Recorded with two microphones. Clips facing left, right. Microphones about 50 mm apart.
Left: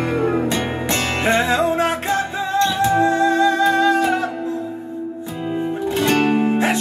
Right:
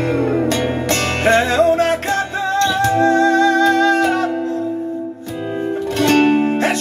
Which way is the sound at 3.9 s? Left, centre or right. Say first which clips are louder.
Right 2 dB; right.